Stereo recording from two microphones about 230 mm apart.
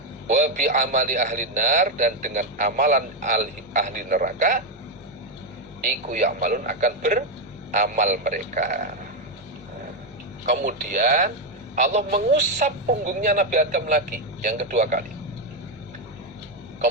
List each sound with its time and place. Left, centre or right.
0.3 s a man's voice: right
5.8 s a man's voice: right
10.4 s a man's voice: right